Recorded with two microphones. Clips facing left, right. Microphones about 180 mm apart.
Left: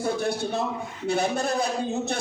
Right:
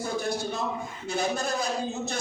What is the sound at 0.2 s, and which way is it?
A man's voice, 60° left (ahead or behind).